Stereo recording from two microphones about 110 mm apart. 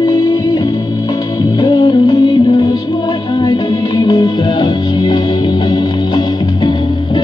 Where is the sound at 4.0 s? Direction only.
45° left (ahead or behind).